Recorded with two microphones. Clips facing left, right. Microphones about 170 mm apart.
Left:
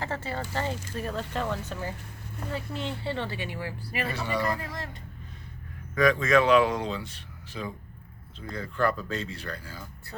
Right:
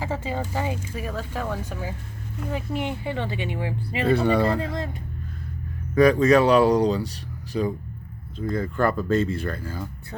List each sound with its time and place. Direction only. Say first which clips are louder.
0.0 s speech: right 4 dB; 15° right (ahead or behind)
4.1 s speech: right 12 dB; 55° right (ahead or behind)
5.9 s speech: right 6 dB; 35° right (ahead or behind)